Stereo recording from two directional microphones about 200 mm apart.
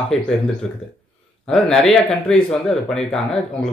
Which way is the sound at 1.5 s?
5° left (ahead or behind).